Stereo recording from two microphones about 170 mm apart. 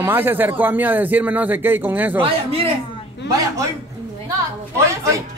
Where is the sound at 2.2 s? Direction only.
35° right (ahead or behind).